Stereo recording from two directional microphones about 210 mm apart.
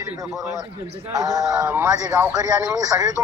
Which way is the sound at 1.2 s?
15° right (ahead or behind).